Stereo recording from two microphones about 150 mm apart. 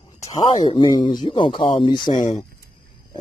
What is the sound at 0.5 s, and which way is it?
A man's voice, 35° left (ahead or behind).